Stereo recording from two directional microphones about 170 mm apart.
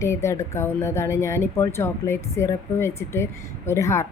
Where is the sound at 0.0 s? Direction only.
15° left (ahead or behind).